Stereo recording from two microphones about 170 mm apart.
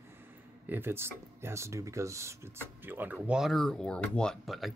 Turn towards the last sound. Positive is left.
turn(degrees=0)  # may be behind; listen again after turning